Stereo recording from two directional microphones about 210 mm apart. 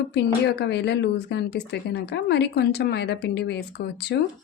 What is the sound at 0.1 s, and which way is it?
A woman's voice, 55° left (ahead or behind).